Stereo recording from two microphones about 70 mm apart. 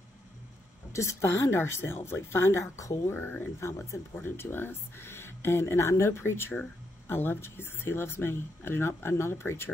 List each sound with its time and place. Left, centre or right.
0.9 s speech: left
3.1 s speech: left
3.6 s speech: left
4.1 s speech: left